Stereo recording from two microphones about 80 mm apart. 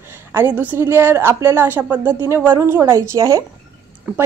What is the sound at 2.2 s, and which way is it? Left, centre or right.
A woman's voice, right.